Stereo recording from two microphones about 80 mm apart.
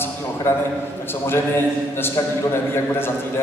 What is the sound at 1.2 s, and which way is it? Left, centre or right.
Speech, left.